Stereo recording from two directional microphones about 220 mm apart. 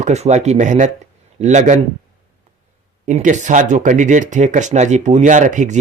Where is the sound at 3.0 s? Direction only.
35° right (ahead or behind).